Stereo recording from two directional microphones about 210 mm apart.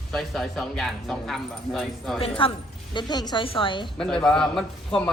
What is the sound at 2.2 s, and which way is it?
A woman's voice, 25° left (ahead or behind).